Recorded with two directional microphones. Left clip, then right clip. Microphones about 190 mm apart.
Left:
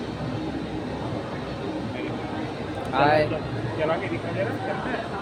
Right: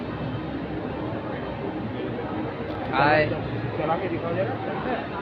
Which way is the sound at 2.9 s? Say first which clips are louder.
Even; 25° left (ahead or behind).